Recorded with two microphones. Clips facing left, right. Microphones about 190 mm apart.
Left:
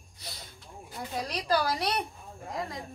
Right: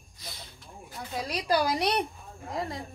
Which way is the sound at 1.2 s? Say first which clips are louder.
Right 2 dB; 10° right (ahead or behind).